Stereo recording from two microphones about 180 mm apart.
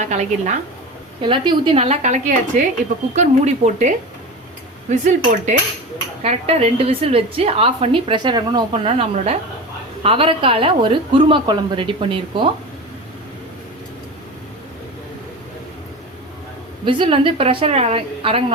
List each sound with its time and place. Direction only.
0.0 s a woman's voice: 40° right (ahead or behind)
1.2 s a woman's voice: 25° right (ahead or behind)
5.5 s dishes: 45° right (ahead or behind)
6.2 s a woman's voice: 35° right (ahead or behind)
16.8 s a woman's voice: 30° right (ahead or behind)